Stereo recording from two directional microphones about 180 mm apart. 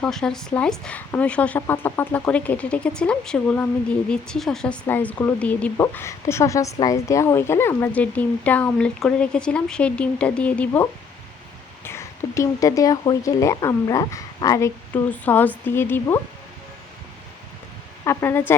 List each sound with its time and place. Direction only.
0.0 s speech: 5° left (ahead or behind)
11.9 s speech: 15° left (ahead or behind)
15.1 s speech: 10° left (ahead or behind)
18.0 s speech: 15° left (ahead or behind)